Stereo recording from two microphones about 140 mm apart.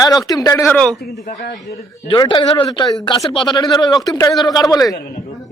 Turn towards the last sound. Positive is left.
turn(degrees=25)  # may be behind; listen again after turning